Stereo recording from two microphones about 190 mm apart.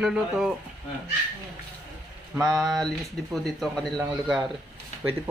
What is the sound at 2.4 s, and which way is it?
Speech, centre (ahead or behind).